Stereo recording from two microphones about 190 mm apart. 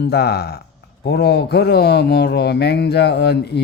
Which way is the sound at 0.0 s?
60° left (ahead or behind).